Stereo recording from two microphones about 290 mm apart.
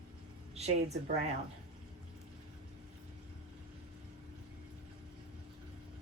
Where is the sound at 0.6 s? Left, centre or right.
Right.